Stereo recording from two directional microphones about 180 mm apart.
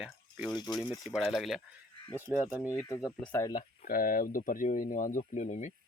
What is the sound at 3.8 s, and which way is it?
Speech, 50° left (ahead or behind).